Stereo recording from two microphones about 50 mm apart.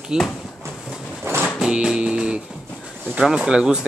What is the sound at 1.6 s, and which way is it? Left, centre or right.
Music, centre.